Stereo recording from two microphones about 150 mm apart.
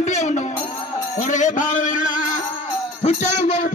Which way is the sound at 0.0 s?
50° left (ahead or behind).